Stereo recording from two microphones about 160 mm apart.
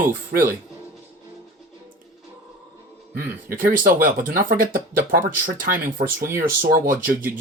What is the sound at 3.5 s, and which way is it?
Speech, 60° right (ahead or behind).